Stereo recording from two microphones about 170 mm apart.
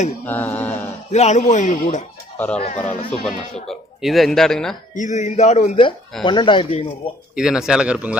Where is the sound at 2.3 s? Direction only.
10° left (ahead or behind).